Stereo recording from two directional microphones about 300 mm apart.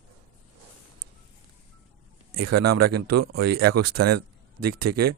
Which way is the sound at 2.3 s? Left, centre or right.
Right.